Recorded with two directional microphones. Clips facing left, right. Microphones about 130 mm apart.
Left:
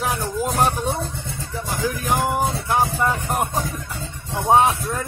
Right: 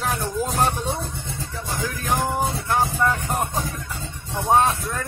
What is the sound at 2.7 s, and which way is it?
Speech, 15° left (ahead or behind).